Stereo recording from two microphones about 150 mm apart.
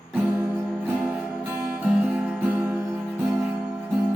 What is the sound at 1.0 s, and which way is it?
Music, 5° right (ahead or behind).